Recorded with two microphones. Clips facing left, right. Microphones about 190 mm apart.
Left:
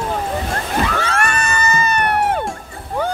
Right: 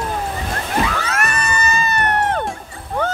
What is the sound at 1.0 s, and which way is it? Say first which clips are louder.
Music: left 2 dB; 30° left (ahead or behind).